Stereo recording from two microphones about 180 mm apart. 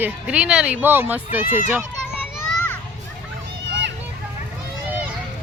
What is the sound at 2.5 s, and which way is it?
Children playing, 10° left (ahead or behind).